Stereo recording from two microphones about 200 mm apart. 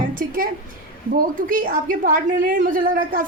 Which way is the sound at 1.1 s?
45° right (ahead or behind).